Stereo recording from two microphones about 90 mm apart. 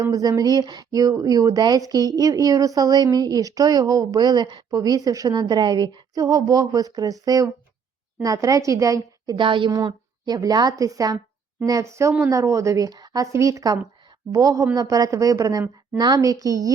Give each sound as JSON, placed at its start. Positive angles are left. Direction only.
{"t": 0.0, "sound": "speech", "side_deg": -45}
{"t": 9.3, "sound": "speech", "side_deg": -65}